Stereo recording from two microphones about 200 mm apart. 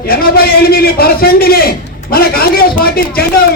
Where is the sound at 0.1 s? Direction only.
50° left (ahead or behind).